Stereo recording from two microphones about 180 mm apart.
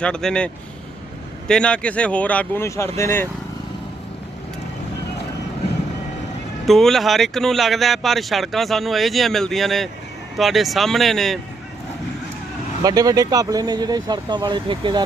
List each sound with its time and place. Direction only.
0.0 s speech: 5° left (ahead or behind)
6.7 s speech: centre (ahead or behind)
12.8 s speech: 20° right (ahead or behind)